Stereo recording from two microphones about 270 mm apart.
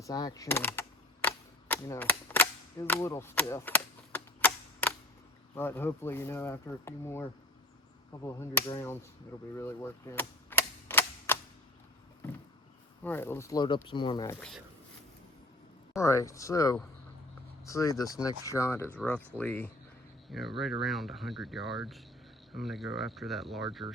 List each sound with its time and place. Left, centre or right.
0.0 s cap gun: centre
5.5 s speech: centre
9.6 s cap gun: centre
13.0 s speech: centre
16.0 s speech: centre